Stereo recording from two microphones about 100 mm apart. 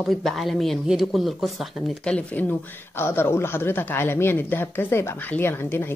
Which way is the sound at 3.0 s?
25° left (ahead or behind).